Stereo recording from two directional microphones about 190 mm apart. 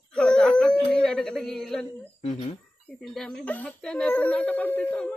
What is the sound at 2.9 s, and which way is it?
Speech, centre (ahead or behind).